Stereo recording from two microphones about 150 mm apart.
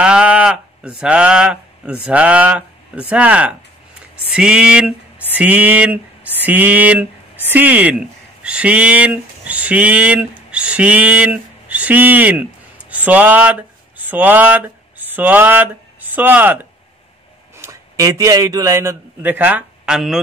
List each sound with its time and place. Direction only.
0.0 s speech: 5° right (ahead or behind)
5.3 s a sound: 10° right (ahead or behind)
7.4 s speech: 10° right (ahead or behind)
17.6 s a man's voice: 20° right (ahead or behind); by 20.2 s 5° right (ahead or behind)